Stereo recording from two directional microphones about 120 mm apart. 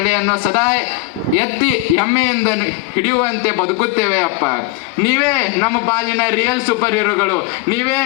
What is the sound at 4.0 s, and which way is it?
A man's voice, 20° left (ahead or behind).